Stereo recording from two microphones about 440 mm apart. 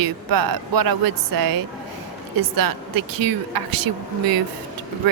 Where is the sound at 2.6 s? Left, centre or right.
Right.